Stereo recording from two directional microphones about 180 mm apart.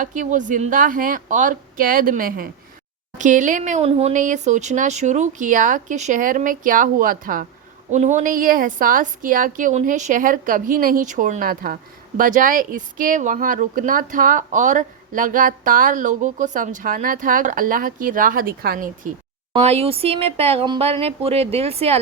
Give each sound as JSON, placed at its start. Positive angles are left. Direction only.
{"t": 0.0, "sound": "a woman's voice", "side_deg": -45}
{"t": 19.6, "sound": "speech", "side_deg": -35}